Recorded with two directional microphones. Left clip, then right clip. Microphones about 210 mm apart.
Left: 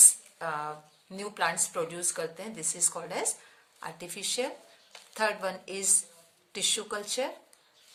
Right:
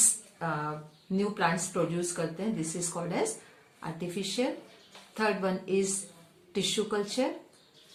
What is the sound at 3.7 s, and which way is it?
Speech, 45° left (ahead or behind).